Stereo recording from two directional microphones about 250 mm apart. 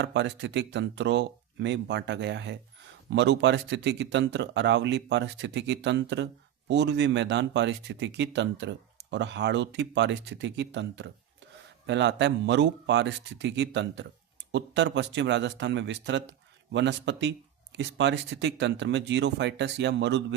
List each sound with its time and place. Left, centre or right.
0.0 s speech: right